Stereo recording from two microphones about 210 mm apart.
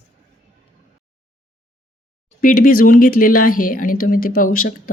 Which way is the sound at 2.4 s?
45° left (ahead or behind).